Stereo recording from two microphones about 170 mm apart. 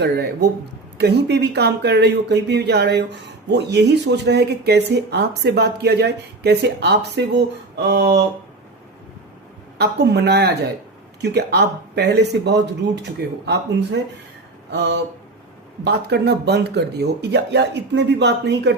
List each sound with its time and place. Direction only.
0.9 s speech: 80° right
9.7 s speech: 80° right
13.0 s speech: 90° right
14.7 s speech: 80° right